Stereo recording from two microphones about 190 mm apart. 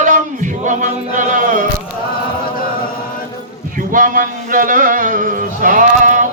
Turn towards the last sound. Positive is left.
turn(degrees=-40)  # may be behind; listen again after turning